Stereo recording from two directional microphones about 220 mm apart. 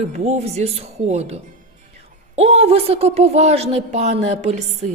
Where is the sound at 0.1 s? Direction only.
30° right (ahead or behind).